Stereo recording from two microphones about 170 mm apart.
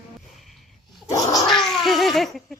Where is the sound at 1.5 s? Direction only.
Centre (ahead or behind).